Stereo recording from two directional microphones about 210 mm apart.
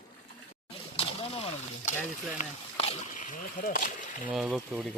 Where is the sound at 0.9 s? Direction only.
25° left (ahead or behind).